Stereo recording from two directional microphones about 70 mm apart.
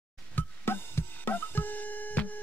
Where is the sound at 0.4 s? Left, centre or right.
Left.